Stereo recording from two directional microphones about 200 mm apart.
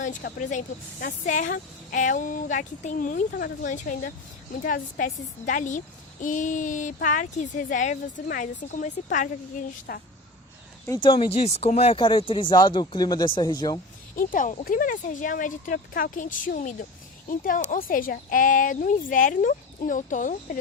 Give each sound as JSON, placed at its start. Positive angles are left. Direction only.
{"t": 0.0, "sound": "a woman's voice", "side_deg": 45}
{"t": 10.8, "sound": "speech", "side_deg": 20}
{"t": 14.2, "sound": "a woman's voice", "side_deg": 40}